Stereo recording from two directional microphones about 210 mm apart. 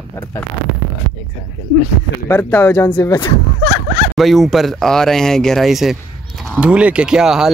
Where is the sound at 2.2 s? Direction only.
10° left (ahead or behind).